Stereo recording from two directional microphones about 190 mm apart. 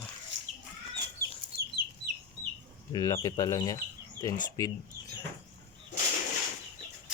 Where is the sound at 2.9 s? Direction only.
20° left (ahead or behind).